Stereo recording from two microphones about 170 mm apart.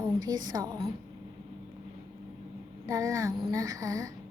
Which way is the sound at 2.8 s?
20° right (ahead or behind).